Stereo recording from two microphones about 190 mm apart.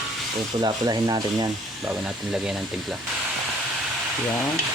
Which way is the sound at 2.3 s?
5° right (ahead or behind).